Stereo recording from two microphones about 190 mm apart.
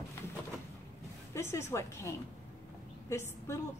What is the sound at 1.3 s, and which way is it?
A woman's voice, 15° left (ahead or behind).